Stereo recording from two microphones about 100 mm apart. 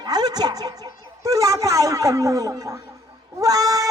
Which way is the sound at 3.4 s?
35° right (ahead or behind).